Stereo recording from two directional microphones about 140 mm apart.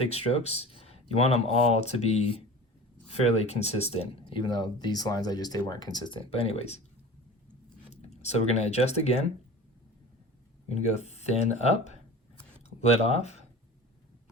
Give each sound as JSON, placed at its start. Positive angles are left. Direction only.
{"t": 0.0, "sound": "speech", "side_deg": 50}
{"t": 8.1, "sound": "speech", "side_deg": 50}
{"t": 10.9, "sound": "speech", "side_deg": 50}